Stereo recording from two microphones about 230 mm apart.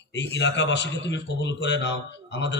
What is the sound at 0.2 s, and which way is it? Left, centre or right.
A man's voice, left.